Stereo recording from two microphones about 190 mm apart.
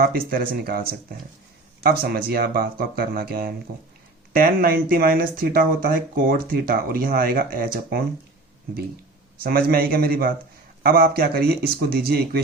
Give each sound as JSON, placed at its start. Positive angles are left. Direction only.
{"t": 0.0, "sound": "speech", "side_deg": -50}
{"t": 9.4, "sound": "speech", "side_deg": -55}